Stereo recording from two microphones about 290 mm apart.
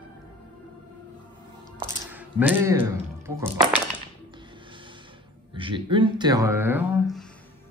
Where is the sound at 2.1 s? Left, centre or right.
Centre.